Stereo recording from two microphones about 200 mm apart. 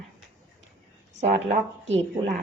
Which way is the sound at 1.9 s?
40° right (ahead or behind).